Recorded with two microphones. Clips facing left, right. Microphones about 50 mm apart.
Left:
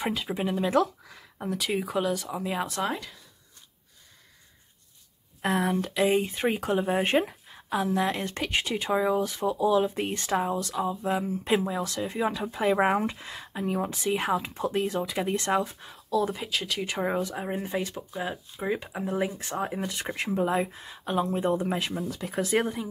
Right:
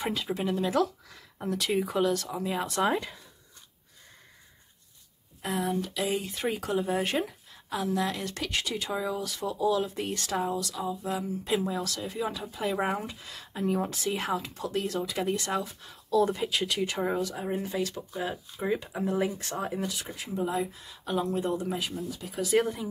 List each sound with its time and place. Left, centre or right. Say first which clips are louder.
0.0 s speech: left 1 dB; centre
5.4 s speech: left 4 dB; left
5.9 s speech: left 6 dB; left
11.6 s speech: left 2 dB; left
15.9 s speech: right 3 dB; centre
16.8 s speech: even; centre
17.1 s speech: left 1 dB; left
20.3 s speech: left 2 dB; left
21.6 s speech: left 3 dB; left
22.3 s speech: right 1 dB; left